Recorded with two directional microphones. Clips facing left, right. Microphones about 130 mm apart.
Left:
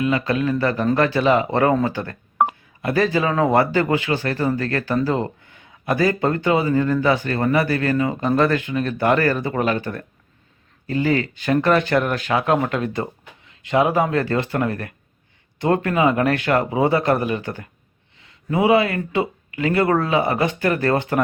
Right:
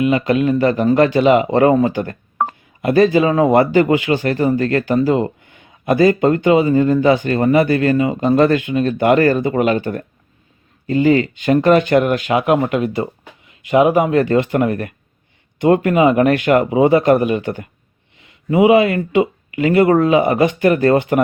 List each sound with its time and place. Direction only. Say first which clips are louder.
0.0 s speech: right 5 dB; 20° right (ahead or behind)